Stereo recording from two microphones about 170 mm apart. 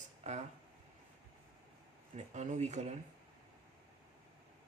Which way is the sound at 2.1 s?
45° right (ahead or behind).